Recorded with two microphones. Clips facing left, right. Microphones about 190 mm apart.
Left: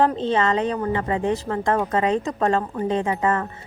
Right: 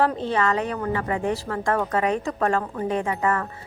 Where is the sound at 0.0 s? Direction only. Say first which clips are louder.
Left 2 dB; 20° left (ahead or behind).